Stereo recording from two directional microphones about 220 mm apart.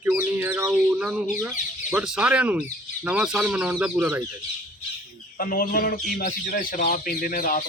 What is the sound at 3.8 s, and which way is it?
Bird, 10° right (ahead or behind).